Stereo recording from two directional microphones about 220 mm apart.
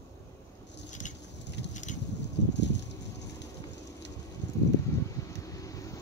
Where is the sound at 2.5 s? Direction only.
50° left (ahead or behind).